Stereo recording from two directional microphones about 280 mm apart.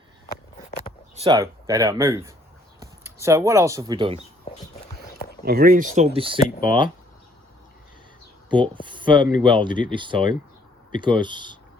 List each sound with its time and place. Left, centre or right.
1.1 s speech: centre
5.5 s speech: right; by 6.8 s centre
8.4 s speech: centre